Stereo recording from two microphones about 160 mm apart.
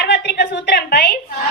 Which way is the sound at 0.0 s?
90° left.